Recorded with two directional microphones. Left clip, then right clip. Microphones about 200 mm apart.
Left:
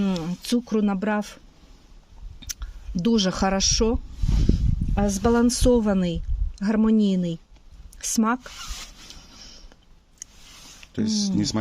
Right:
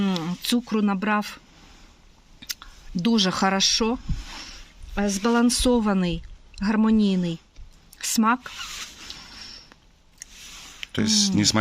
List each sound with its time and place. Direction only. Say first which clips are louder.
0.0 s speech: right 2 dB; 15° left (ahead or behind)
2.4 s speech: right 2 dB; 20° left (ahead or behind)
4.9 s a woman's voice: left 1 dB; 30° left (ahead or behind)
10.2 s a sound: even; 20° left (ahead or behind)
10.9 s speech: right 4 dB; 10° right (ahead or behind)